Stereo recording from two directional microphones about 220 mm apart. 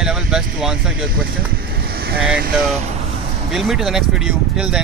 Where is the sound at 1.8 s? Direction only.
45° right (ahead or behind).